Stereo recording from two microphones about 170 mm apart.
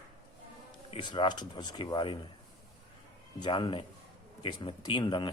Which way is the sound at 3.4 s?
25° left (ahead or behind).